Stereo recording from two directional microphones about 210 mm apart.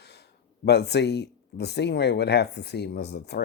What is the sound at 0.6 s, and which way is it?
Speech, 50° left (ahead or behind).